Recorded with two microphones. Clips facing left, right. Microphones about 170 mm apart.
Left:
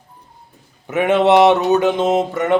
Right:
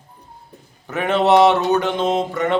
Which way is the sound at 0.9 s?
20° left (ahead or behind).